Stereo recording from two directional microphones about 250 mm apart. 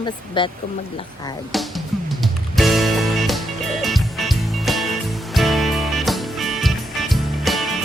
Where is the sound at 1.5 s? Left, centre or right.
Centre.